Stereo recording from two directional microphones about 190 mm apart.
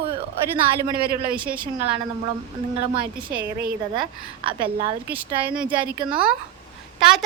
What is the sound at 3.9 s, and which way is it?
Speech, 25° right (ahead or behind).